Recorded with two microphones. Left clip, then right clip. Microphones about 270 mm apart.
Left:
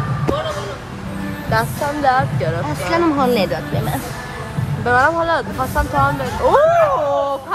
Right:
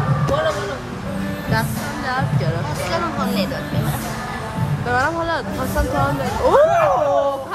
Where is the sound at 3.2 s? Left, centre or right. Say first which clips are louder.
Left 7 dB; left.